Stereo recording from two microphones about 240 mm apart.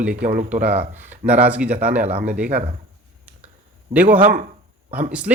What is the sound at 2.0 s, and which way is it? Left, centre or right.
Speech, right.